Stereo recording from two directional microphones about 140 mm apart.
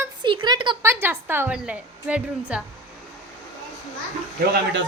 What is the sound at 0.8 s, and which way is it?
Speech, 15° right (ahead or behind).